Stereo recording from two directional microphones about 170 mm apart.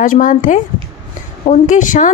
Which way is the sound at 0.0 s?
50° left (ahead or behind).